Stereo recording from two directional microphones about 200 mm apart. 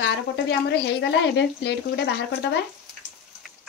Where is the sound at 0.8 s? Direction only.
60° left (ahead or behind).